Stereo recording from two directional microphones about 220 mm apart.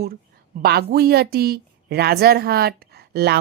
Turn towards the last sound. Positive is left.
turn(degrees=-45)  # may be behind; listen again after turning